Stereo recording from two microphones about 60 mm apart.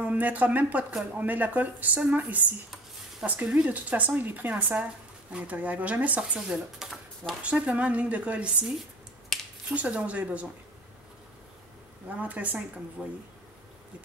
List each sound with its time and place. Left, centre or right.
0.0 s speech: right
3.6 s speech: right
9.3 s a sound: centre
9.8 s speech: right
12.2 s speech: right
13.0 s speech: centre